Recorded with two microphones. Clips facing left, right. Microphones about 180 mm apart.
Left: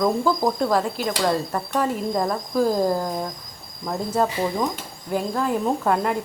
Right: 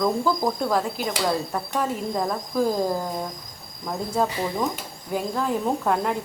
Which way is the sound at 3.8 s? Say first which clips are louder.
Left 2 dB; centre (ahead or behind).